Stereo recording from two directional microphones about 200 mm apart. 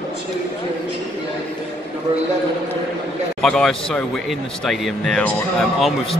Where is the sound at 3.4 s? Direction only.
Centre (ahead or behind).